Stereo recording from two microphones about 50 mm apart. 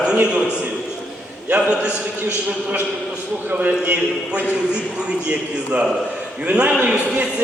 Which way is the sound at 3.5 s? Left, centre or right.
Right.